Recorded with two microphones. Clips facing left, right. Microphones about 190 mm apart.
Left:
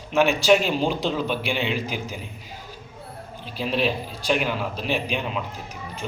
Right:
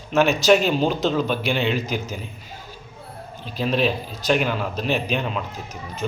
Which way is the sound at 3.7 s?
40° right (ahead or behind).